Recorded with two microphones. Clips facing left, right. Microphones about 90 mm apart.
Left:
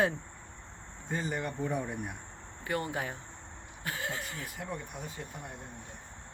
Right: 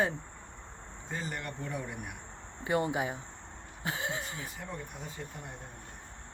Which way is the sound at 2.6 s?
20° right (ahead or behind).